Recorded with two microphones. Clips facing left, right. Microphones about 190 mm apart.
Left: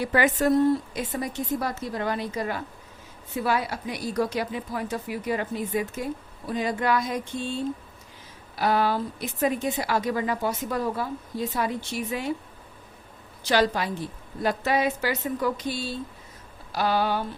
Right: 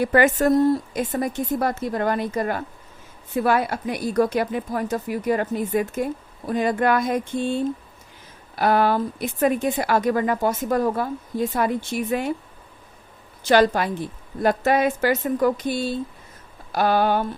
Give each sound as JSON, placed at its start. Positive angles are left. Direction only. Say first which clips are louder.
{"t": 0.0, "sound": "speech", "louder": "right 5 dB", "side_deg": -50}
{"t": 13.4, "sound": "speech", "louder": "right 6 dB", "side_deg": -55}